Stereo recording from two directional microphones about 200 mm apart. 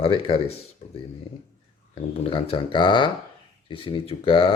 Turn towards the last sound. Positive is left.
turn(degrees=25)  # may be behind; listen again after turning